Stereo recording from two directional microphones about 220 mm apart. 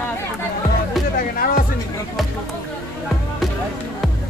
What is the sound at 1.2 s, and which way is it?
Music, 40° left (ahead or behind).